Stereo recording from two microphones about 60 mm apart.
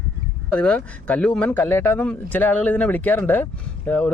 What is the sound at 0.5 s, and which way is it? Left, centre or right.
Speech, left.